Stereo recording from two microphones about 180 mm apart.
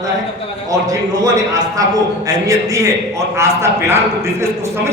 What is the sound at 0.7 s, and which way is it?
A man's voice, 20° right (ahead or behind).